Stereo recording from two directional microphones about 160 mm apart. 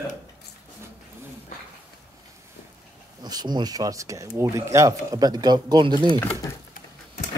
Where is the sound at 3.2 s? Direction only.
25° right (ahead or behind).